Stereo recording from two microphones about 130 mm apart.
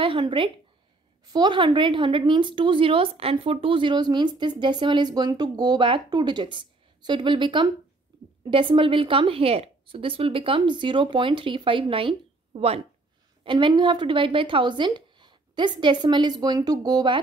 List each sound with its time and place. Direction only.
0.0 s a woman's voice: 40° right (ahead or behind)
13.4 s speech: 40° right (ahead or behind)